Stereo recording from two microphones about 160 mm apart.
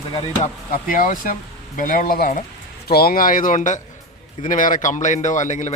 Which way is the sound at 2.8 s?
75° left (ahead or behind).